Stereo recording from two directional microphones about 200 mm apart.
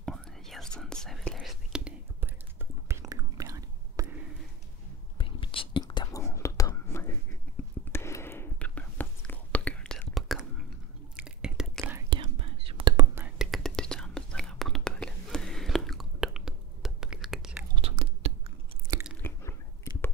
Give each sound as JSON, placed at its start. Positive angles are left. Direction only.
{"t": 0.0, "sound": "whispering", "side_deg": 0}
{"t": 5.1, "sound": "whispering", "side_deg": 25}
{"t": 12.1, "sound": "whispering", "side_deg": -25}
{"t": 13.1, "sound": "whispering", "side_deg": -5}
{"t": 17.7, "sound": "whispering", "side_deg": -30}
{"t": 18.9, "sound": "chewing", "side_deg": -20}
{"t": 19.2, "sound": "a sound", "side_deg": 10}